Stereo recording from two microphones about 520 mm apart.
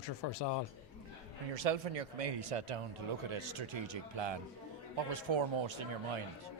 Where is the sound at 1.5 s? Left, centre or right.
Right.